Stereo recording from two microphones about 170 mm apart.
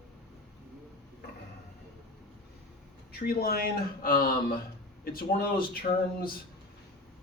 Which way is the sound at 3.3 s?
60° left (ahead or behind).